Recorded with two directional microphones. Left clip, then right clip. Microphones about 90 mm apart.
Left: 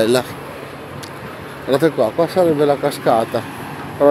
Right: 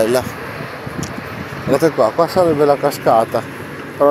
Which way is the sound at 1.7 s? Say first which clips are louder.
Right 2 dB; 50° left (ahead or behind).